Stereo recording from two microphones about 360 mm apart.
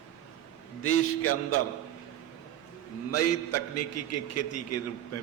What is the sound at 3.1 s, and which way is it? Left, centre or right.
A man's voice, left.